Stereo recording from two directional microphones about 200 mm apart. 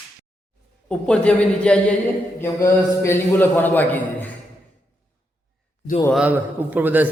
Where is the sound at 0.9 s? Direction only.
5° left (ahead or behind).